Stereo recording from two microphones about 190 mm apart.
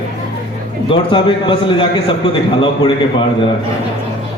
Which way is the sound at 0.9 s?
25° left (ahead or behind).